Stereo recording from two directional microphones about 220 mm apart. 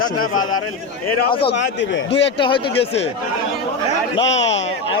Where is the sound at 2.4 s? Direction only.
20° left (ahead or behind).